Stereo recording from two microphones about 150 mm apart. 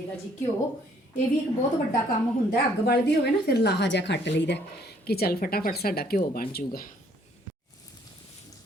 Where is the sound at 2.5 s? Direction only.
90° left.